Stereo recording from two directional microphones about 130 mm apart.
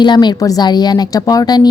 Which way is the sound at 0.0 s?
35° left (ahead or behind).